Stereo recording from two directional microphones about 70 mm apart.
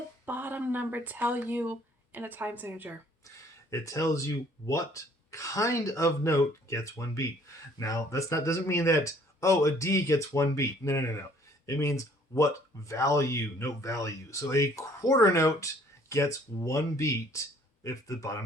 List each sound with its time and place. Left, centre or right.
0.3 s speech: right
3.2 s speech: left